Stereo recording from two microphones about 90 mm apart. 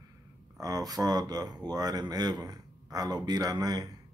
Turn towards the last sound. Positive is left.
turn(degrees=-50)  # may be behind; listen again after turning